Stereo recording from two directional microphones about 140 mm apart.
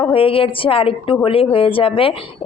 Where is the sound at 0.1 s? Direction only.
40° left (ahead or behind).